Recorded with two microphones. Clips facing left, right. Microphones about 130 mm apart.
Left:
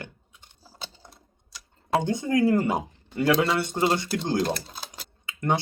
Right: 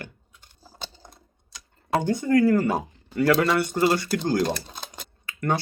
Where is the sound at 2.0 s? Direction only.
20° left (ahead or behind).